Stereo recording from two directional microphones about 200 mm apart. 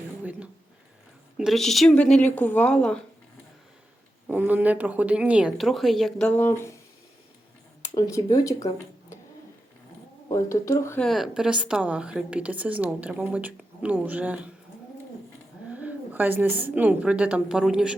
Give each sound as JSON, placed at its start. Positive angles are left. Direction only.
{"t": 0.2, "sound": "a sound", "side_deg": -10}
{"t": 1.4, "sound": "speech", "side_deg": 0}
{"t": 4.3, "sound": "speech", "side_deg": -10}
{"t": 7.9, "sound": "speech", "side_deg": 15}
{"t": 10.3, "sound": "speech", "side_deg": 15}
{"t": 11.1, "sound": "a woman's voice", "side_deg": 0}
{"t": 15.7, "sound": "a woman's voice", "side_deg": -10}